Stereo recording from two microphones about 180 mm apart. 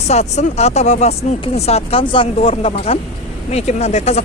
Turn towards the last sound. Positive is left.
turn(degrees=35)  # may be behind; listen again after turning